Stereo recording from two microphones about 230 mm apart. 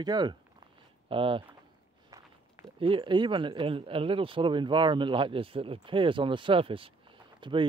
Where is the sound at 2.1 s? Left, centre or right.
Centre.